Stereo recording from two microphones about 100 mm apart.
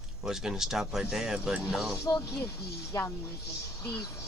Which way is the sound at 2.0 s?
30° left (ahead or behind).